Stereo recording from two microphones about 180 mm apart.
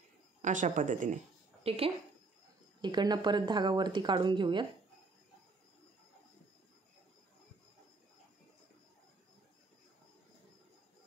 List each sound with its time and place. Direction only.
0.4 s speech: 45° right (ahead or behind)
1.6 s speech: 35° right (ahead or behind)